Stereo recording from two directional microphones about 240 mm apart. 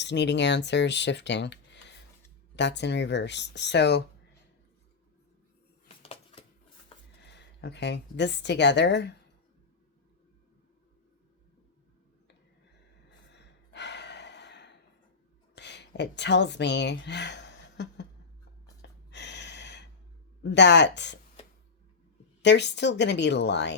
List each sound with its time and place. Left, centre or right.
0.0 s speech: left
6.0 s a sound: left
7.2 s speech: left
13.1 s gasp: left
15.5 s a woman's voice: left
18.6 s a sound: left
20.4 s speech: left
22.4 s speech: left